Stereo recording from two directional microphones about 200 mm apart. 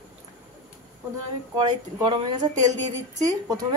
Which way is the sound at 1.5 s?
20° right (ahead or behind).